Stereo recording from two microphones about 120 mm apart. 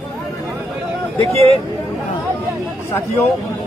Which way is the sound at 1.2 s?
55° right (ahead or behind).